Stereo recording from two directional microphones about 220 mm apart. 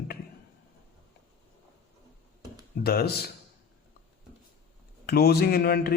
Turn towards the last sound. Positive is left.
turn(degrees=45)  # may be behind; listen again after turning